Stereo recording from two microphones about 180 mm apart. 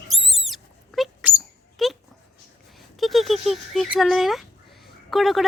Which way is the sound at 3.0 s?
Centre (ahead or behind).